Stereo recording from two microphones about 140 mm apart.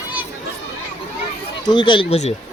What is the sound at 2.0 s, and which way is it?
Speech, 50° left (ahead or behind).